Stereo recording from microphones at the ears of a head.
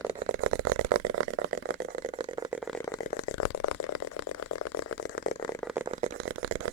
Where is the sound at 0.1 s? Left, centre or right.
Right.